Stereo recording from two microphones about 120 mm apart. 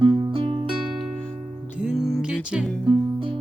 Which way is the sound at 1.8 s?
5° right (ahead or behind).